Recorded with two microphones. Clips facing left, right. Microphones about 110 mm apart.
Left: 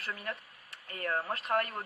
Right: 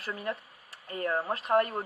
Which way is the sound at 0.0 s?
30° right (ahead or behind).